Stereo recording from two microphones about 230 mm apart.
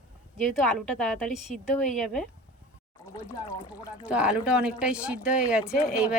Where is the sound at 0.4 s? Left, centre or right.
Centre.